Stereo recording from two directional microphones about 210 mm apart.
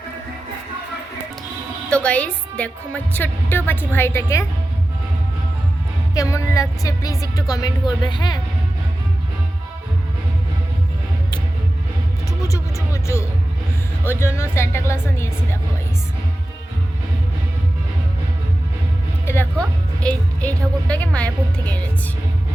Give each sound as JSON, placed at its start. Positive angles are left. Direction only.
{"t": 1.9, "sound": "a woman's voice", "side_deg": 5}
{"t": 6.1, "sound": "a woman's voice", "side_deg": 15}
{"t": 12.4, "sound": "a woman's voice", "side_deg": 15}
{"t": 19.2, "sound": "music", "side_deg": 10}
{"t": 20.8, "sound": "speech", "side_deg": 5}